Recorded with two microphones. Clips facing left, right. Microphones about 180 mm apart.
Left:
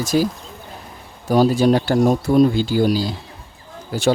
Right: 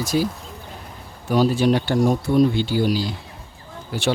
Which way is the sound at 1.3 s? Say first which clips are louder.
Left 3 dB; 40° left (ahead or behind).